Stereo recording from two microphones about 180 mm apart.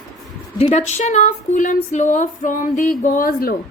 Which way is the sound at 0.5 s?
40° left (ahead or behind).